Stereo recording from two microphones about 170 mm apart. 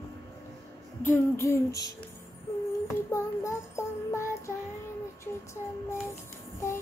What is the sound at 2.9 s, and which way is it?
Music, 15° left (ahead or behind).